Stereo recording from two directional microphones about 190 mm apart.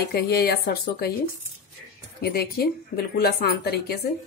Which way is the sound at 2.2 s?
55° left (ahead or behind).